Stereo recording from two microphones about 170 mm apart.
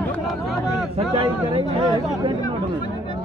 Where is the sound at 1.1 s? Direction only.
30° right (ahead or behind).